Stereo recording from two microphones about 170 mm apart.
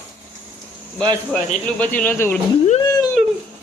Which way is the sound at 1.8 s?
10° left (ahead or behind).